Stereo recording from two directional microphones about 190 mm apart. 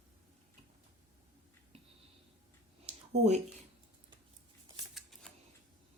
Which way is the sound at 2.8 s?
35° right (ahead or behind).